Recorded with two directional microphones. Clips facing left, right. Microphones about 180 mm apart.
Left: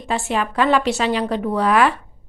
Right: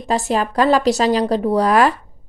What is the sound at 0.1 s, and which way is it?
Speech, 40° right (ahead or behind).